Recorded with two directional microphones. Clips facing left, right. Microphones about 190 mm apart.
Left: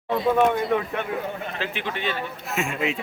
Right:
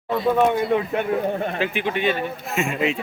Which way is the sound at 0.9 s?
35° right (ahead or behind).